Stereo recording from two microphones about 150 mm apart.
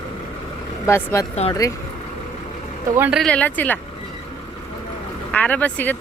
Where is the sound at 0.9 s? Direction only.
20° left (ahead or behind).